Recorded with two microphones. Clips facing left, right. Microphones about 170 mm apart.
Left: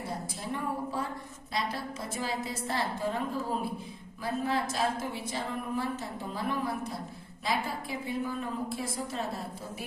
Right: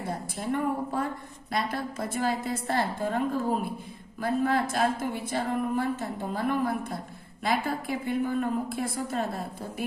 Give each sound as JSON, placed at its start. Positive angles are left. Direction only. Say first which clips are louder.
{"t": 0.3, "sound": "a woman's voice", "louder": "right 8 dB", "side_deg": -55}
{"t": 4.2, "sound": "a woman's voice", "louder": "right 5 dB", "side_deg": -55}